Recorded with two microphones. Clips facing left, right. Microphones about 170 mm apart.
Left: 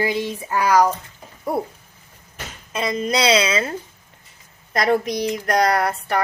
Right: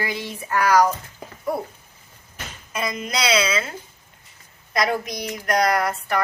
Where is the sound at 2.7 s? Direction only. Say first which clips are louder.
Left 5 dB; 30° left (ahead or behind).